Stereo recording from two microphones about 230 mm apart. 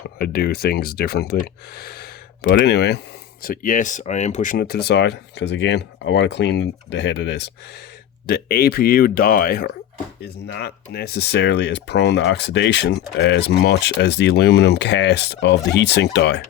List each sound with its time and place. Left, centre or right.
0.2 s speech: left